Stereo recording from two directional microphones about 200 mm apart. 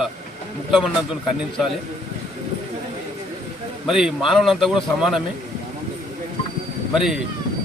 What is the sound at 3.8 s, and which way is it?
A man's voice, centre (ahead or behind).